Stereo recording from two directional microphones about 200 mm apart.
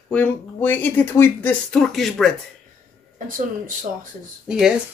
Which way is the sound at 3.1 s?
40° right (ahead or behind).